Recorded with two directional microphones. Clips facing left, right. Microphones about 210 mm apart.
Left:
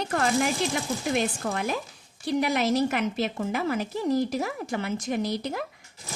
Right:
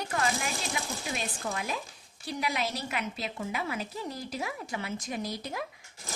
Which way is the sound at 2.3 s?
50° left (ahead or behind).